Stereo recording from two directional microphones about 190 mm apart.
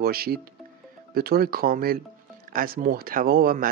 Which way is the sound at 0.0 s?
55° right (ahead or behind).